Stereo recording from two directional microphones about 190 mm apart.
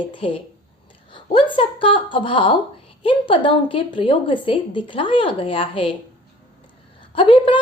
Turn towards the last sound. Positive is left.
turn(degrees=25)  # may be behind; listen again after turning